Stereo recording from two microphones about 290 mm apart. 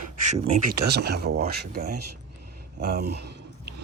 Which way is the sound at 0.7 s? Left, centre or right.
Right.